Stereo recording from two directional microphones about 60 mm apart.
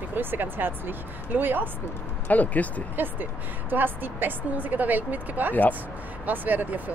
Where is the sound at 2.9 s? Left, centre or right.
Right.